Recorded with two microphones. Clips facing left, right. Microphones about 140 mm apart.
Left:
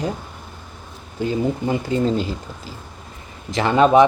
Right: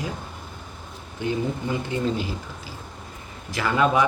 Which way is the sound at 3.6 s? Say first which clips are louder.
Left 7 dB; 25° left (ahead or behind).